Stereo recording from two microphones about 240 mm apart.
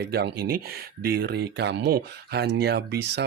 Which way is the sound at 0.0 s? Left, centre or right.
Right.